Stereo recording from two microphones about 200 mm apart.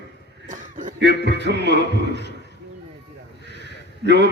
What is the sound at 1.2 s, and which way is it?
A man's voice, 60° right (ahead or behind).